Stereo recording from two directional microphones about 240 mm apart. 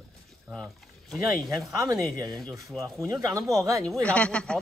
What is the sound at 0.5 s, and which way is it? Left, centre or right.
Speech, centre.